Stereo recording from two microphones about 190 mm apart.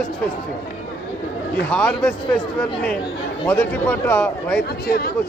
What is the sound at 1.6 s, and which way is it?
Speech, 5° left (ahead or behind).